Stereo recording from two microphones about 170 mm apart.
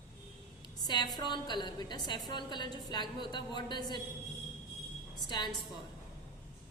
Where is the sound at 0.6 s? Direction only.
25° left (ahead or behind).